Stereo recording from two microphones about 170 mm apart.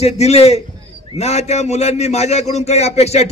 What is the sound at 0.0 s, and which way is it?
A man's voice, 40° left (ahead or behind).